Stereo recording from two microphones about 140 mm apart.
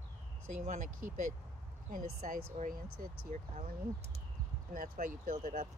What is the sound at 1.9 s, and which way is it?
Speech, 80° right.